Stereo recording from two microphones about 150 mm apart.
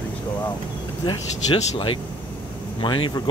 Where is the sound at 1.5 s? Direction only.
35° left (ahead or behind).